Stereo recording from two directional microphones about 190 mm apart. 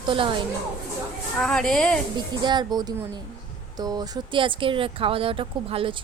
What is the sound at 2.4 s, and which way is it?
Speech, 25° right (ahead or behind).